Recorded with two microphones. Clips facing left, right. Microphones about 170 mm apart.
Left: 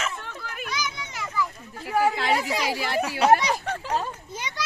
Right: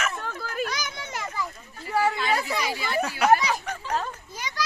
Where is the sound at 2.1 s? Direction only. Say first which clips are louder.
Left 2 dB; 85° left.